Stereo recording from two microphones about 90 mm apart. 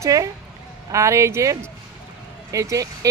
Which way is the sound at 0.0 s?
40° right (ahead or behind).